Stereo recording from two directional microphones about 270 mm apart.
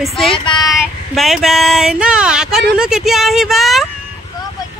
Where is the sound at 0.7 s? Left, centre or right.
Centre.